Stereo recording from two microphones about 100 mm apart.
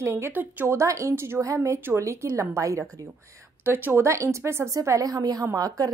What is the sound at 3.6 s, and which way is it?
A woman's voice, 20° right (ahead or behind).